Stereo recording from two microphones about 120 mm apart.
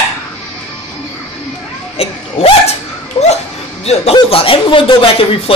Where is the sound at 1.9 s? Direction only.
55° left (ahead or behind).